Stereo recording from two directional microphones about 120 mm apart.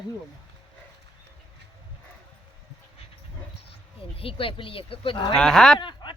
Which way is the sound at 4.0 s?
50° left (ahead or behind).